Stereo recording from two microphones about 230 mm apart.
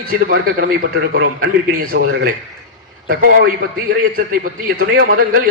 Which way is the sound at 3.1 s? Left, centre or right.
Right.